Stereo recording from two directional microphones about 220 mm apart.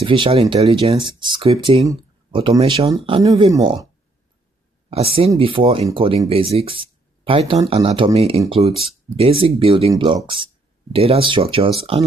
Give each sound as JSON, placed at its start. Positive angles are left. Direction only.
{"t": 0.0, "sound": "speech", "side_deg": -25}